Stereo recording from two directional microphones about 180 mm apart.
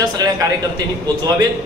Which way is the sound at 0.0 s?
20° right (ahead or behind).